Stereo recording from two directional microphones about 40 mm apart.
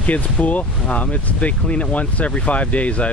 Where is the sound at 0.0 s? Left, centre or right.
Left.